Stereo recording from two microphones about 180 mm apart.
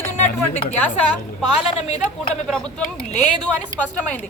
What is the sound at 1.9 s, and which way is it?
Speech, 40° left (ahead or behind).